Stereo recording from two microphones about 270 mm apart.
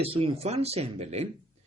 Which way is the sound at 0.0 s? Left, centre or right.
Right.